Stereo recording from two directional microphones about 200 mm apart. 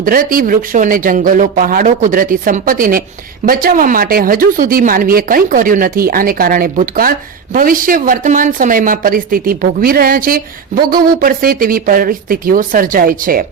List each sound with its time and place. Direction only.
0.0 s a woman's voice: 45° right (ahead or behind)